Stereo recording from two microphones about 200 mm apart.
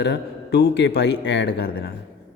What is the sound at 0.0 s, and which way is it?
A man's voice, 60° left (ahead or behind).